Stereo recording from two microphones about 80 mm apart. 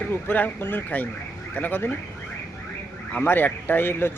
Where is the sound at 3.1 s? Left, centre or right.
Left.